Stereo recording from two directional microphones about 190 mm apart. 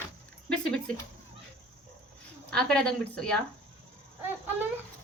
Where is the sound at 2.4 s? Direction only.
5° left (ahead or behind).